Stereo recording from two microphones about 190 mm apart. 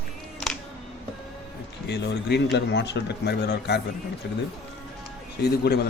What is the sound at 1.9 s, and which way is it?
Speech, 60° left (ahead or behind).